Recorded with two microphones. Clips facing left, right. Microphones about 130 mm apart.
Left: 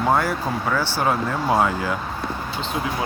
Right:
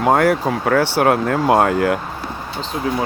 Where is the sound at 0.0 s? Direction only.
65° right (ahead or behind).